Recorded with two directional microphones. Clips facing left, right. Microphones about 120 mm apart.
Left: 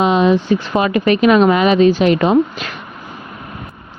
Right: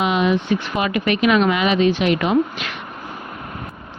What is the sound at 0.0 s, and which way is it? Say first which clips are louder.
Speech: left 5 dB; 35° left (ahead or behind).